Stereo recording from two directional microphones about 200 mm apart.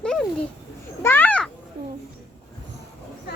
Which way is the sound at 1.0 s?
10° left (ahead or behind).